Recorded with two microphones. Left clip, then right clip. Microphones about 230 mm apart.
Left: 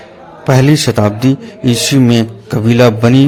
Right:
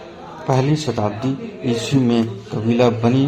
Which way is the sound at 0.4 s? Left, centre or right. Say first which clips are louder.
Left 8 dB; left.